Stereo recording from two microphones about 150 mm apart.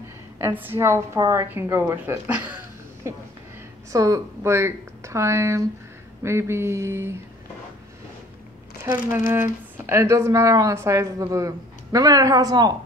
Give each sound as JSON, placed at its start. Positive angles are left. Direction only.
{"t": 0.6, "sound": "a woman's voice", "side_deg": -15}
{"t": 3.9, "sound": "a woman's voice", "side_deg": -20}
{"t": 8.8, "sound": "a woman's voice", "side_deg": -25}